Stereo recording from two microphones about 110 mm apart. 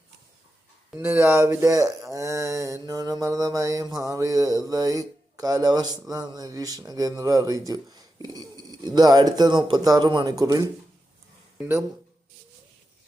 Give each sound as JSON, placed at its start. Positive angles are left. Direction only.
{"t": 0.9, "sound": "speech", "side_deg": -15}
{"t": 10.2, "sound": "speech", "side_deg": -35}
{"t": 11.5, "sound": "speech", "side_deg": -20}